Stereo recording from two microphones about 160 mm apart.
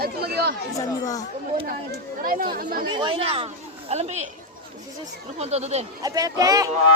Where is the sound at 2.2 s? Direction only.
60° right (ahead or behind).